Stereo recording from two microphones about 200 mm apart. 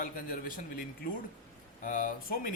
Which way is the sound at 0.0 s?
45° left (ahead or behind).